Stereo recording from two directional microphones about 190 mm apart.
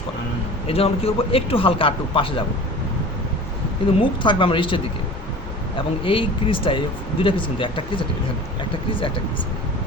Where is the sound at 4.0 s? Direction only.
25° left (ahead or behind).